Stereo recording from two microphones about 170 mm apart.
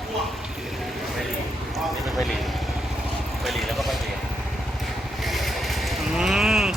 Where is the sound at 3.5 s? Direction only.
Centre (ahead or behind).